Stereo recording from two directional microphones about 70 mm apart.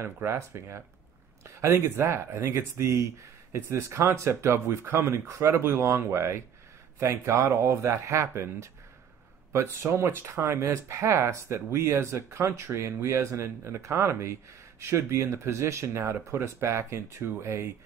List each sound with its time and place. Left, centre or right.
0.0 s speech: right